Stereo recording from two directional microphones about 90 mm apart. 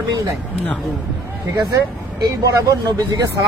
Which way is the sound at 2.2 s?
40° right (ahead or behind).